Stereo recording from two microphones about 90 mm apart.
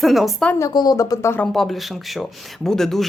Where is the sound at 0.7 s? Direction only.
45° left (ahead or behind).